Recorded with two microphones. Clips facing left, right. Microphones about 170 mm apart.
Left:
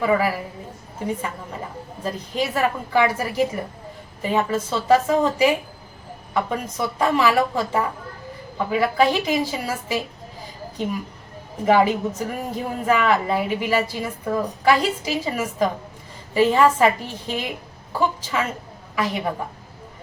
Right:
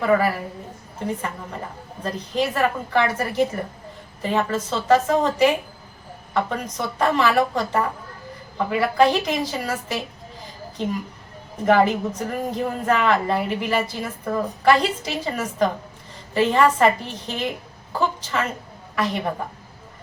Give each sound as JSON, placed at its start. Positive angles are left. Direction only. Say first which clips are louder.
{"t": 0.0, "sound": "a woman's voice", "louder": "right 1 dB", "side_deg": 10}
{"t": 11.6, "sound": "a woman's voice", "louder": "even", "side_deg": 5}